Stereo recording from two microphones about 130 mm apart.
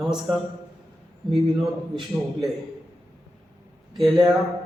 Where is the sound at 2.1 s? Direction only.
15° right (ahead or behind).